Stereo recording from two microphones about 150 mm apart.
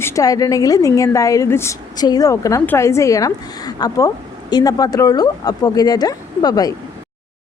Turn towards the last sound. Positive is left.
turn(degrees=25)  # may be behind; listen again after turning